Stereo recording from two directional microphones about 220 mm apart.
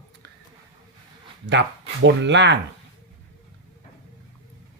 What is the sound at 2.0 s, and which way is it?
Speech, 50° right (ahead or behind).